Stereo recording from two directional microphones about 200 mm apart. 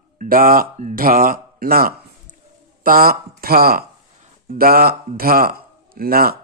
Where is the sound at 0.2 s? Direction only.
45° right (ahead or behind).